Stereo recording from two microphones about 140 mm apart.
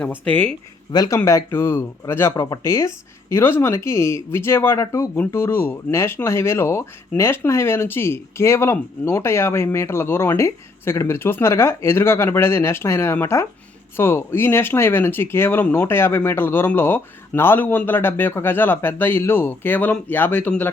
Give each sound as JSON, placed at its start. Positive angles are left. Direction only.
{"t": 0.3, "sound": "speech", "side_deg": 15}
{"t": 0.9, "sound": "speech", "side_deg": 25}